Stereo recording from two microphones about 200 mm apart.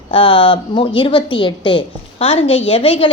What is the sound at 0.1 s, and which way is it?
A woman's voice, 25° left (ahead or behind).